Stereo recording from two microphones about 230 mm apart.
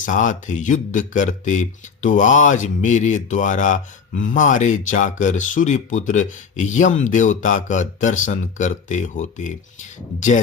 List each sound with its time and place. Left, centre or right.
0.0 s speech: left